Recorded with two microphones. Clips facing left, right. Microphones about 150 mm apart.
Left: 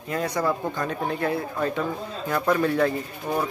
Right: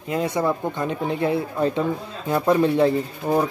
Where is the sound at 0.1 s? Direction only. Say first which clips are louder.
Right 3 dB; 25° right (ahead or behind).